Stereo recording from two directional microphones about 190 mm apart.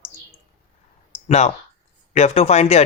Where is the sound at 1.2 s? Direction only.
35° left (ahead or behind).